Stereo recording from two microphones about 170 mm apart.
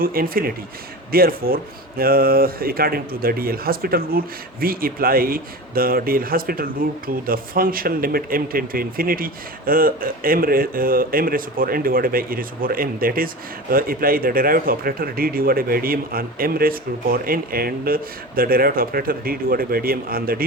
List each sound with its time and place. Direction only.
0.0 s speech: 60° right (ahead or behind)